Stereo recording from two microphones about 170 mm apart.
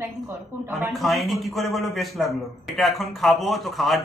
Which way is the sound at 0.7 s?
Centre (ahead or behind).